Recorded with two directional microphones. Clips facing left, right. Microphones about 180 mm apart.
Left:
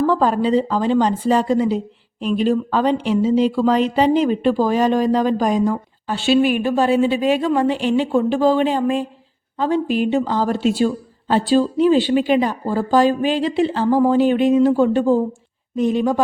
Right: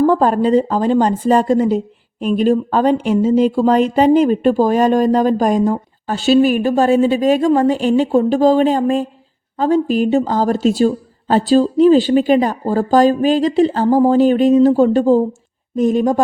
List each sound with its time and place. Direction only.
0.0 s a woman's voice: 45° right (ahead or behind)